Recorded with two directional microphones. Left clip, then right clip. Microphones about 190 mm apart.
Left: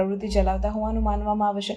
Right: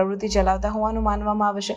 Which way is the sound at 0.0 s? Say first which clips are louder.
Right 3 dB; 15° right (ahead or behind).